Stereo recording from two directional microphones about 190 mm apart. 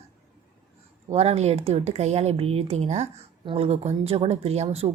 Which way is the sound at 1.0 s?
35° right (ahead or behind).